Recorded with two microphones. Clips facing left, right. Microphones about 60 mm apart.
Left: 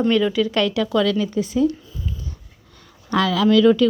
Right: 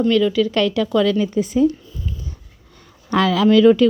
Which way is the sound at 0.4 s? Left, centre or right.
Centre.